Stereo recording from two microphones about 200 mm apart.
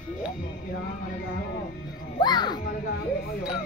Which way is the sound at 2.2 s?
20° left (ahead or behind).